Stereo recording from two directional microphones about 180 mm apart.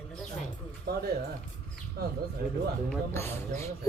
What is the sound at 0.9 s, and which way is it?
Speech, 60° right (ahead or behind).